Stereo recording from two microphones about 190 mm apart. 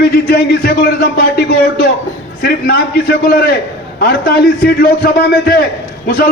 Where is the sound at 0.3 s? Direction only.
55° left (ahead or behind).